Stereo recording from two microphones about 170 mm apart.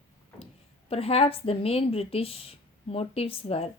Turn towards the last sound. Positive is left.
turn(degrees=35)  # may be behind; listen again after turning